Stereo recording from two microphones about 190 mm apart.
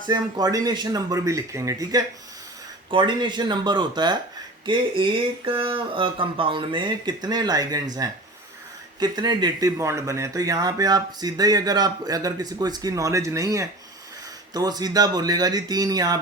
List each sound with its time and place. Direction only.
0.1 s speech: 20° right (ahead or behind)
9.0 s speech: 20° right (ahead or behind)